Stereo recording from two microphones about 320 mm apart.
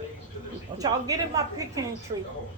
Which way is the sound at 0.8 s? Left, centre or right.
Centre.